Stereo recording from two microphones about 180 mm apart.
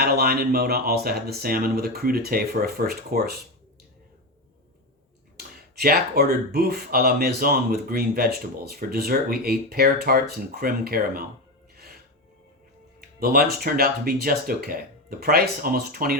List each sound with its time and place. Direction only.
0.0 s speech: 60° right (ahead or behind)
5.8 s speech: 55° right (ahead or behind)
13.0 s speech: 55° right (ahead or behind)